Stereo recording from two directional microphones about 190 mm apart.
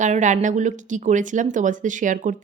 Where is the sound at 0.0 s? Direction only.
40° right (ahead or behind).